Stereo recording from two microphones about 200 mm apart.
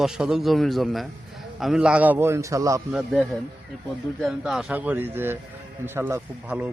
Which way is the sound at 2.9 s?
Centre (ahead or behind).